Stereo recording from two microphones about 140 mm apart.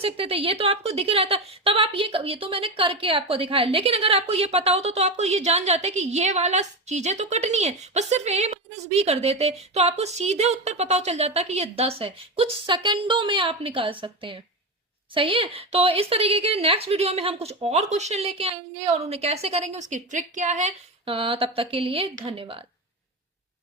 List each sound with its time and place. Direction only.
0.0 s a woman's voice: 40° right (ahead or behind)
19.9 s speech: 60° right (ahead or behind); by 22.6 s 40° right (ahead or behind)